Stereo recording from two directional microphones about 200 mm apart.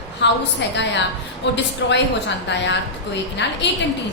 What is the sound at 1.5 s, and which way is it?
A woman's voice, 60° left (ahead or behind).